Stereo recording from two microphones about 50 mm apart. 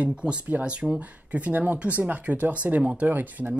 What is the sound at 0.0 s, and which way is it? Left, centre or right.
Speech, centre.